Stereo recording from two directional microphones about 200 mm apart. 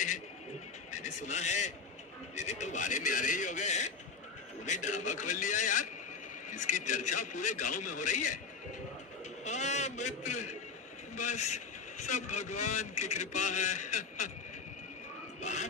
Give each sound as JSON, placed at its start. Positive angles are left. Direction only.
{"t": 0.9, "sound": "a man's voice", "side_deg": 35}
{"t": 9.4, "sound": "a sound", "side_deg": 35}
{"t": 11.2, "sound": "a man's voice", "side_deg": 35}